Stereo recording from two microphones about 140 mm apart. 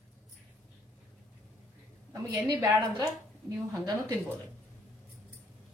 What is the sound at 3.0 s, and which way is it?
Speech, 25° right (ahead or behind).